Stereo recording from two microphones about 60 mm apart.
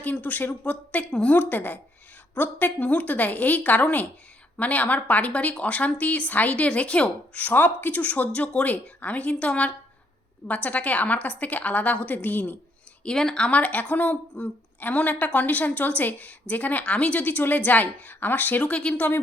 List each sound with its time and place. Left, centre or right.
0.0 s a woman's voice: left
13.1 s a woman's voice: centre; by 18.6 s left
18.6 s a woman's voice: centre